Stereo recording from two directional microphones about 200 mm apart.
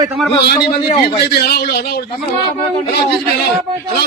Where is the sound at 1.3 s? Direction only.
50° left (ahead or behind).